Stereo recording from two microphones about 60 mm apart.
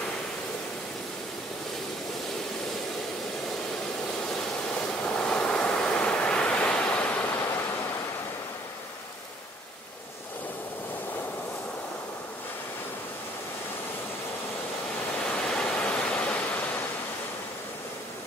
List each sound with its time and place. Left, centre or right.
4.4 s waves: centre
15.2 s waterfall: centre